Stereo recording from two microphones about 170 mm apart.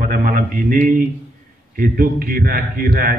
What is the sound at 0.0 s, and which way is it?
A man's voice, 55° right (ahead or behind).